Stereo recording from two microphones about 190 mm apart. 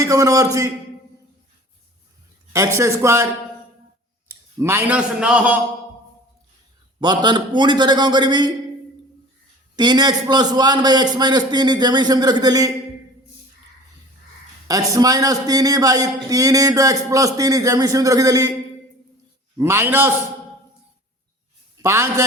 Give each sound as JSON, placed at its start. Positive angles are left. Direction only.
{"t": 0.0, "sound": "a man's voice", "side_deg": -20}
{"t": 2.5, "sound": "a man's voice", "side_deg": -15}
{"t": 4.5, "sound": "a man's voice", "side_deg": -15}
{"t": 7.0, "sound": "a man's voice", "side_deg": -25}
{"t": 9.7, "sound": "a man's voice", "side_deg": -20}
{"t": 14.7, "sound": "a man's voice", "side_deg": -20}
{"t": 19.5, "sound": "a man's voice", "side_deg": -15}
{"t": 21.8, "sound": "a man's voice", "side_deg": -15}